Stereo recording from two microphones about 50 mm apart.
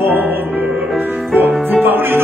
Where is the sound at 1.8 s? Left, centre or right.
Right.